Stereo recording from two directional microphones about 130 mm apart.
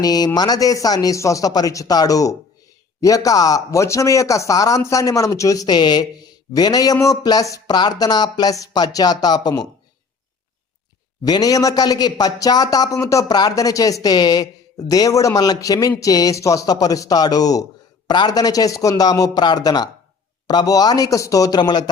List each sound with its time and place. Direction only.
0.0 s speech: 30° left (ahead or behind)
11.2 s speech: 30° left (ahead or behind)